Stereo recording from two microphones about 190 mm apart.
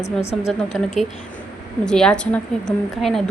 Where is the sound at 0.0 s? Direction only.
35° left (ahead or behind).